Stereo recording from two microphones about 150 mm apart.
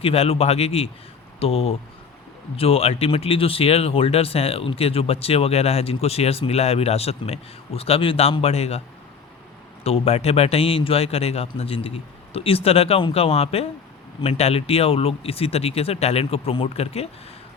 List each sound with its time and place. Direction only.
0.0 s speech: 40° left (ahead or behind)
9.8 s speech: 40° left (ahead or behind)